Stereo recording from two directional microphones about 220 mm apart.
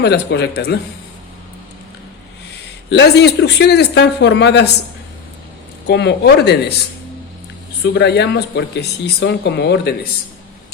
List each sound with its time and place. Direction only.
0.0 s speech: 50° left (ahead or behind)
2.9 s speech: 50° left (ahead or behind)
5.9 s speech: 50° left (ahead or behind)
7.9 s speech: 50° left (ahead or behind)